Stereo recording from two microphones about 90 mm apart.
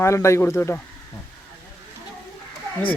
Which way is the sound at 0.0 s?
30° left (ahead or behind).